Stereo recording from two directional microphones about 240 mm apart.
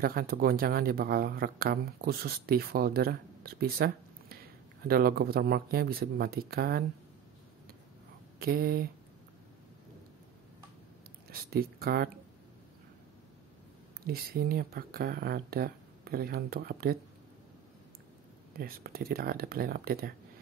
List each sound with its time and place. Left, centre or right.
0.0 s speech: right
8.4 s speech: right
11.2 s speech: right
14.0 s speech: right
18.6 s speech: right